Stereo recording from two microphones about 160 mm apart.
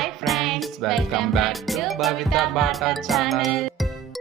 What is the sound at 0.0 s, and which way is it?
Music, centre (ahead or behind).